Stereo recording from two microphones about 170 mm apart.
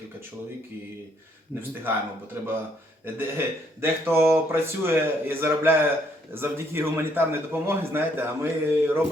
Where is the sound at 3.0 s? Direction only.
15° right (ahead or behind).